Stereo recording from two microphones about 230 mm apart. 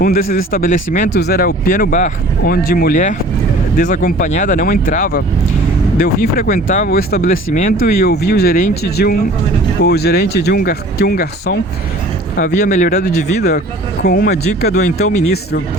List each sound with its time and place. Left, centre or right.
0.0 s speech: left
14.0 s speech: left
14.9 s speech: left